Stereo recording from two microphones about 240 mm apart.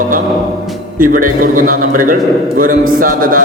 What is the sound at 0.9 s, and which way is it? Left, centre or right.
A man's voice, right.